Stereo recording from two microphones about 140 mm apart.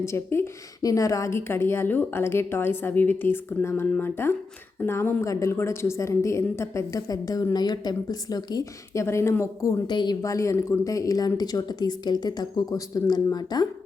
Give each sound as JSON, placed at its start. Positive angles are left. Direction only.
{"t": 0.0, "sound": "a woman's voice", "side_deg": 20}
{"t": 9.8, "sound": "a woman's voice", "side_deg": 35}